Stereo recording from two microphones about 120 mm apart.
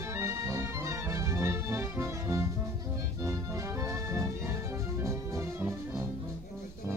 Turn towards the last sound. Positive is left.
turn(degrees=-25)  # may be behind; listen again after turning